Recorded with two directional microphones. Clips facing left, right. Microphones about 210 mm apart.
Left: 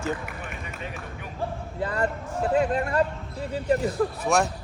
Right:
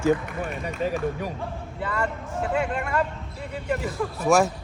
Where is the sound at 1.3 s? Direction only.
35° left (ahead or behind).